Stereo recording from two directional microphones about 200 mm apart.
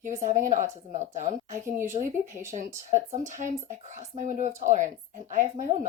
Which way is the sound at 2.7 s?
40° right (ahead or behind).